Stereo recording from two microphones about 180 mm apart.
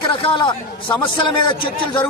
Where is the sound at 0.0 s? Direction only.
25° left (ahead or behind).